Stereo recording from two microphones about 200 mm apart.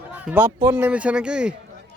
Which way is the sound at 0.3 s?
10° right (ahead or behind).